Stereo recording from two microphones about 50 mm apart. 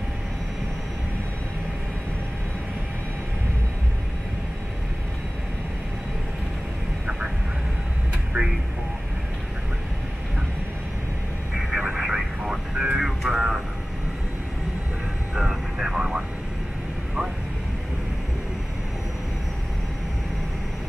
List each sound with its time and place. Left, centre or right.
8.3 s a sound: right
11.7 s vehicle: centre
15.3 s vehicle: centre